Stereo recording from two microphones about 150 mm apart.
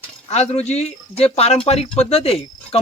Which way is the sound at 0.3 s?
45° left (ahead or behind).